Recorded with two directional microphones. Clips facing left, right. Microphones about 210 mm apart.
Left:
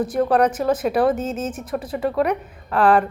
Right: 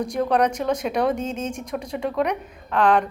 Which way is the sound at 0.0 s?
5° left (ahead or behind).